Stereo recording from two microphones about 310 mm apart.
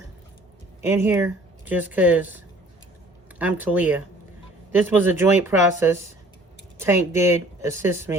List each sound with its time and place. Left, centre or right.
0.8 s speech: centre